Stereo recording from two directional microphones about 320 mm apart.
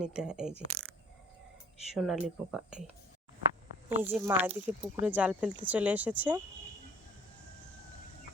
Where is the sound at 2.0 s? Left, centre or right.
Centre.